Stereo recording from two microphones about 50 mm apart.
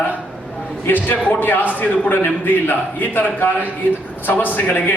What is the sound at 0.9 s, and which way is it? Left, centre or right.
A man's voice, left.